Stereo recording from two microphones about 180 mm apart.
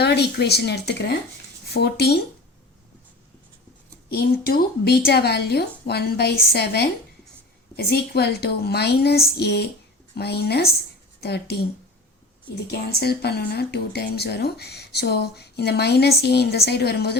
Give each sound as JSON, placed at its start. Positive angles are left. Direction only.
{"t": 0.0, "sound": "speech", "side_deg": 65}
{"t": 4.1, "sound": "speech", "side_deg": 60}
{"t": 7.9, "sound": "speech", "side_deg": 65}
{"t": 12.7, "sound": "speech", "side_deg": 60}